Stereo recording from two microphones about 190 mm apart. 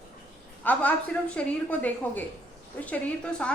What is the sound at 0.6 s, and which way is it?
A woman's voice, 10° left (ahead or behind).